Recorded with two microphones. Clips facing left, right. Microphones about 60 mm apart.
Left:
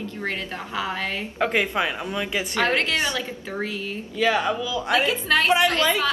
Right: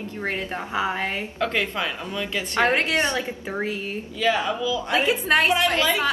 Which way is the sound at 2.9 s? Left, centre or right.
Right.